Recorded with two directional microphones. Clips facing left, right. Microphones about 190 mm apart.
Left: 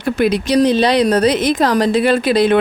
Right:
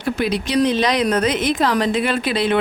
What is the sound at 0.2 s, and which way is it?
A woman's voice, 45° left (ahead or behind).